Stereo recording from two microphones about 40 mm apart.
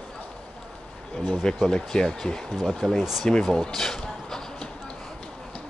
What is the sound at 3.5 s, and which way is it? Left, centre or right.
Speech, centre.